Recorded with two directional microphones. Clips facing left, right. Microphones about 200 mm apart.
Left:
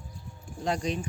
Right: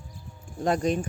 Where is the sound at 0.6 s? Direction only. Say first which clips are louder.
Right 5 dB; 50° right (ahead or behind).